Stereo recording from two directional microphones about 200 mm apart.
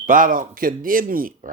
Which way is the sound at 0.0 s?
45° right (ahead or behind).